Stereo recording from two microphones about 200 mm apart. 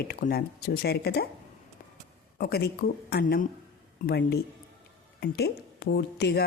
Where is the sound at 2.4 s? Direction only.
50° left (ahead or behind).